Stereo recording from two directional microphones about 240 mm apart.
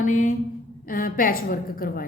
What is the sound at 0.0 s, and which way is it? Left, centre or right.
A woman's voice, left.